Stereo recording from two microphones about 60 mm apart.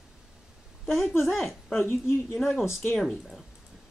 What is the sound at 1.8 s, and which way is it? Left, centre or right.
Speech, left.